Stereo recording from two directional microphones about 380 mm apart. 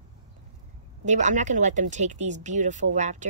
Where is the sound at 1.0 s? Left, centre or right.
Centre.